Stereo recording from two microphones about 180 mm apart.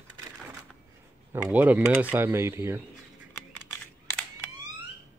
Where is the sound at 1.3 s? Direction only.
10° right (ahead or behind).